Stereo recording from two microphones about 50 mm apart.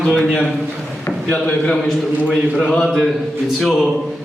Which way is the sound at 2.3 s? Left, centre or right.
Centre.